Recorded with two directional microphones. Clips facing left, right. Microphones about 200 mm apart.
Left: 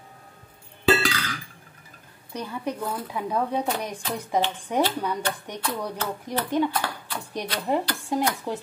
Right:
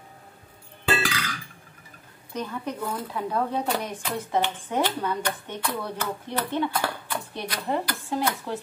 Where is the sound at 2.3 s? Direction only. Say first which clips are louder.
Left 1 dB; 10° left (ahead or behind).